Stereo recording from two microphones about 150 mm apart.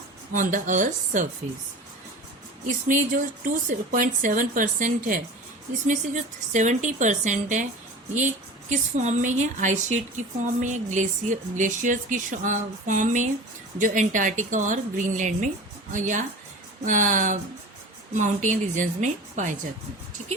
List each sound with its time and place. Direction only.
0.3 s speech: 60° right (ahead or behind)
2.6 s speech: 60° right (ahead or behind)
5.9 s speech: 55° right (ahead or behind)
8.7 s a woman's voice: 55° right (ahead or behind)